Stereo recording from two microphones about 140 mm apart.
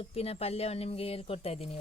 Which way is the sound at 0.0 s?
45° left (ahead or behind).